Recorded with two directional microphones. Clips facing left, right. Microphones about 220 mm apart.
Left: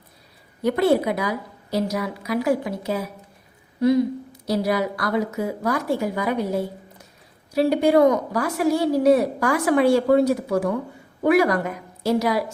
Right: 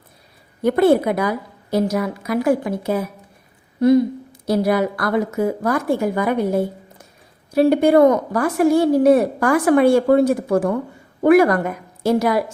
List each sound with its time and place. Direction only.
0.6 s a woman's voice: 50° right (ahead or behind)